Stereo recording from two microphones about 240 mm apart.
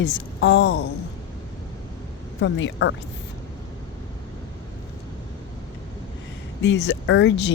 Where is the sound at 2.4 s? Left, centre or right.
Left.